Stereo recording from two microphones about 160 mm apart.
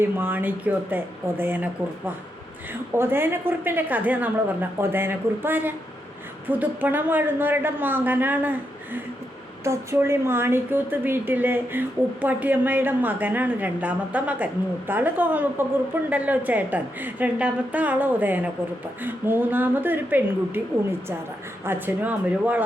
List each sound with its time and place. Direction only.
0.0 s a woman's voice: 10° right (ahead or behind)
21.6 s a woman's voice: 15° right (ahead or behind)